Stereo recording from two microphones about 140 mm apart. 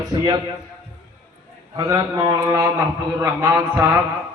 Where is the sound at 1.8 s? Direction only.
25° right (ahead or behind).